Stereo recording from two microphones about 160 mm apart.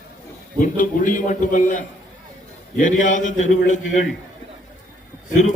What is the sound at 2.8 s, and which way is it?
Speech, 50° left (ahead or behind).